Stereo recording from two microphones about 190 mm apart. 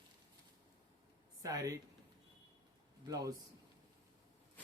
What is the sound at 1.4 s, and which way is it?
Speech, 15° right (ahead or behind).